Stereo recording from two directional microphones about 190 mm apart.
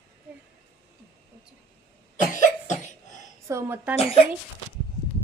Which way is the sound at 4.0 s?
30° left (ahead or behind).